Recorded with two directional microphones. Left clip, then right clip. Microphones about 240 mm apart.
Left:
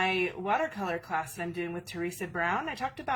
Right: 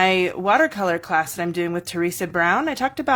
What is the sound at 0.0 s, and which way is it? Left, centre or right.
Speech, right.